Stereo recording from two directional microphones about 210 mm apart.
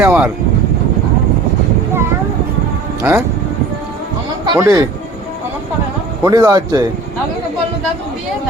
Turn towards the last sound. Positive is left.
turn(degrees=-20)  # may be behind; listen again after turning